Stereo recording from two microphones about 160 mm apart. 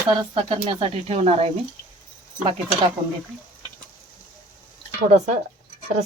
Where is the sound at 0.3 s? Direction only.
35° right (ahead or behind).